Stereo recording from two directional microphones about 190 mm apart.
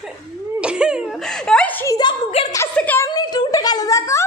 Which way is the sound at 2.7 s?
10° left (ahead or behind).